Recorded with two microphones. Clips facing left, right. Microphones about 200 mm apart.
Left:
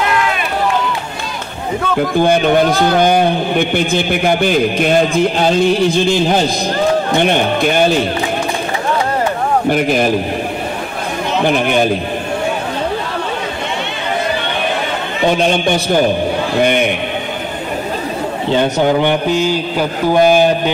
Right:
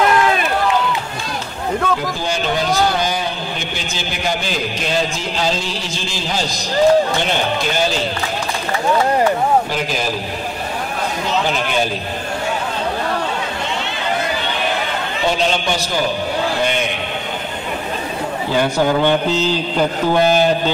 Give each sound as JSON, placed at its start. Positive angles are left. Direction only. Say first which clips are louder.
{"t": 2.1, "sound": "a man's voice", "louder": "left 9 dB", "side_deg": 55}
{"t": 9.7, "sound": "a man's voice", "louder": "left 8 dB", "side_deg": 60}
{"t": 11.4, "sound": "a man's voice", "louder": "left 6 dB", "side_deg": 55}
{"t": 15.2, "sound": "a man's voice", "louder": "left 5 dB", "side_deg": 55}
{"t": 18.5, "sound": "a man's voice", "louder": "left 3 dB", "side_deg": 20}